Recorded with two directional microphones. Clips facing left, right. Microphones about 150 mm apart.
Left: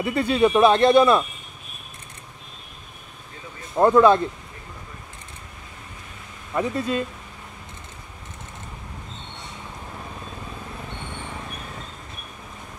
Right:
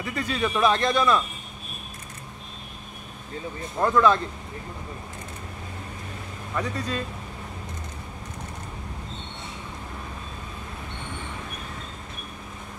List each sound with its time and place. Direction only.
0.0 s speech: 30° left (ahead or behind)
3.8 s speech: 30° left (ahead or behind)
6.5 s speech: 25° left (ahead or behind)